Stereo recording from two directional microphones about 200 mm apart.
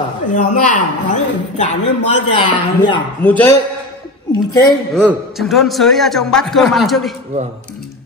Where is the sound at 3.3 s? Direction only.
5° left (ahead or behind).